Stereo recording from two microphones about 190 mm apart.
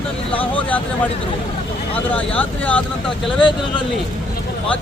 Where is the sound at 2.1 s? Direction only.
5° left (ahead or behind).